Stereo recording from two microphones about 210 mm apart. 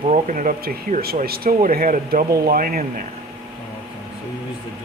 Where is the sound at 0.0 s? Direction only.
35° right (ahead or behind).